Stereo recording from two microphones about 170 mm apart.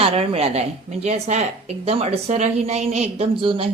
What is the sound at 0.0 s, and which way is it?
A woman's voice, 35° right (ahead or behind).